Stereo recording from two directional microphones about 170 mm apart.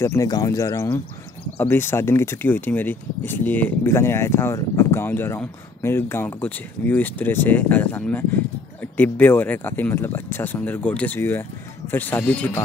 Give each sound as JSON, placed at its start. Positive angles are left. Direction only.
{"t": 0.0, "sound": "speech", "side_deg": 15}